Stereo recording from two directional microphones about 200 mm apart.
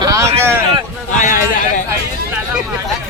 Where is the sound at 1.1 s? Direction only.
40° left (ahead or behind).